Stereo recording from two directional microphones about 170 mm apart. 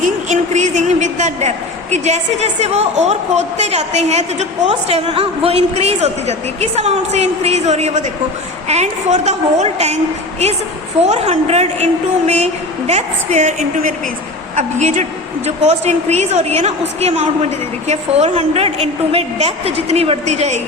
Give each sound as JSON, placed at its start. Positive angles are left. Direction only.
{"t": 0.0, "sound": "a woman's voice", "side_deg": -45}
{"t": 11.1, "sound": "a woman's voice", "side_deg": -40}